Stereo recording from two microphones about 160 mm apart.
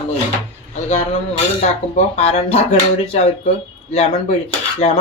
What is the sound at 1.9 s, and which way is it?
Speech, 45° left (ahead or behind).